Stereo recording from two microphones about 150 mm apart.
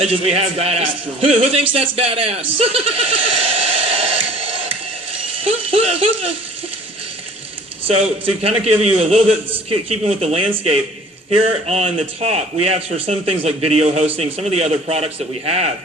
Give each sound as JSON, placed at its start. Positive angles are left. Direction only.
{"t": 0.0, "sound": "a man's voice", "side_deg": -40}
{"t": 7.9, "sound": "a man's voice", "side_deg": -40}